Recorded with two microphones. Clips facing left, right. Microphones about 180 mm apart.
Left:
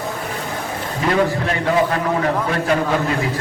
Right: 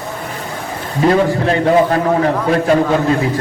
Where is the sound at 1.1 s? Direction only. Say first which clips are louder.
Right 5 dB; 35° right (ahead or behind).